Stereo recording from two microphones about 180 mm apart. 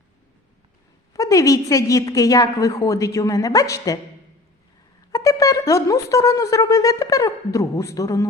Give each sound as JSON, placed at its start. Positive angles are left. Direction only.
{"t": 1.1, "sound": "wind instrument", "side_deg": 15}
{"t": 5.1, "sound": "wind instrument", "side_deg": 20}